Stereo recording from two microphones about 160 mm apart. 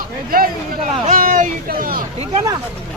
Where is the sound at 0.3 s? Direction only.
65° right (ahead or behind).